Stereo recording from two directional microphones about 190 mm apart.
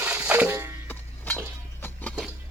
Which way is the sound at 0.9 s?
10° left (ahead or behind).